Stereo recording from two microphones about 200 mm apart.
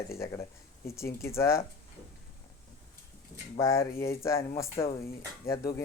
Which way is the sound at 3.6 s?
15° left (ahead or behind).